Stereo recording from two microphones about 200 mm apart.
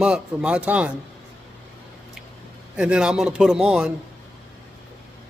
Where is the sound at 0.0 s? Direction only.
5° right (ahead or behind).